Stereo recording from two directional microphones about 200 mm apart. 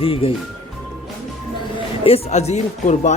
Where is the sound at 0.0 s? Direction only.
25° left (ahead or behind).